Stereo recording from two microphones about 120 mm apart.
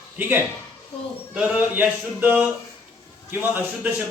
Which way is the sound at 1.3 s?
15° right (ahead or behind).